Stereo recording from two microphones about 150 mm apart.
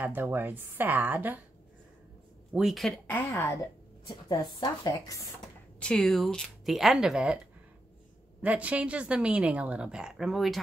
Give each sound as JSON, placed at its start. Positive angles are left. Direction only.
{"t": 0.0, "sound": "a woman's voice", "side_deg": -15}
{"t": 2.5, "sound": "speech", "side_deg": 0}
{"t": 3.1, "sound": "a woman's voice", "side_deg": 15}
{"t": 4.1, "sound": "a woman's voice", "side_deg": 30}
{"t": 5.8, "sound": "speech", "side_deg": 5}
{"t": 8.4, "sound": "a woman's voice", "side_deg": -10}